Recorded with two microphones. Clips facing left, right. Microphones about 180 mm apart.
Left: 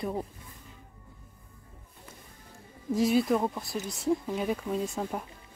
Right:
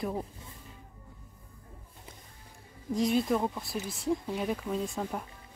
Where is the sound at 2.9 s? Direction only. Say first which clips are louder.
Left 2 dB; 5° left (ahead or behind).